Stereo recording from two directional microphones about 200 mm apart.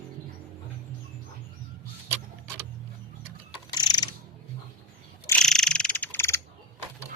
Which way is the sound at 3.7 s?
20° left (ahead or behind).